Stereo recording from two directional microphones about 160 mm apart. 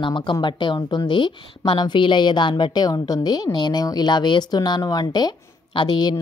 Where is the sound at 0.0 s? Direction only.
30° left (ahead or behind).